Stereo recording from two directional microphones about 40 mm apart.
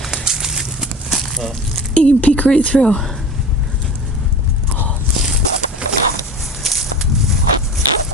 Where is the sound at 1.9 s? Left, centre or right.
Left.